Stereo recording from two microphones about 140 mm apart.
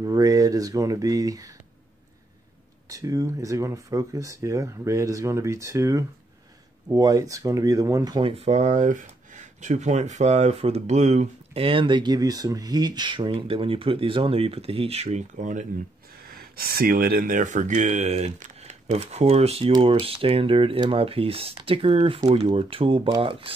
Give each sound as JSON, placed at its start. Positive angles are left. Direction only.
{"t": 0.0, "sound": "speech", "side_deg": -25}
{"t": 2.9, "sound": "speech", "side_deg": -25}
{"t": 8.3, "sound": "speech", "side_deg": -50}
{"t": 11.6, "sound": "speech", "side_deg": -35}
{"t": 16.3, "sound": "speech", "side_deg": -90}